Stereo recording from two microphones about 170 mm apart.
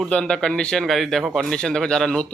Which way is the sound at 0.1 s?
5° left (ahead or behind).